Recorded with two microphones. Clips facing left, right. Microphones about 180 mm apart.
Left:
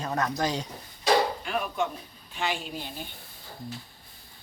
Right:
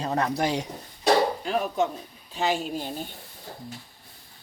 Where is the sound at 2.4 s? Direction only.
40° right (ahead or behind).